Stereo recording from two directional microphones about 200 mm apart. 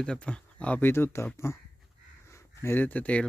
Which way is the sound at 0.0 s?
5° left (ahead or behind).